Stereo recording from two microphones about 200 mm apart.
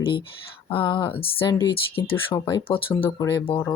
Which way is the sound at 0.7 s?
25° left (ahead or behind).